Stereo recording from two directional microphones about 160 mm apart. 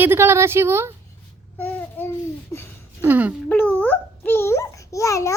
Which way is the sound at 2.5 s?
15° left (ahead or behind).